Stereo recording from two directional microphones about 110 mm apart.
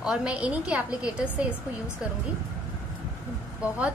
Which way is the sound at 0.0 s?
10° right (ahead or behind).